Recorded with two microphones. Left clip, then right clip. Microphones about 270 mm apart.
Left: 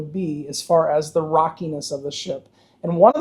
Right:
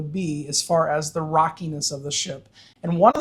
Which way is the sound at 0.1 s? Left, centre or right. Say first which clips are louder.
Right 3 dB; right.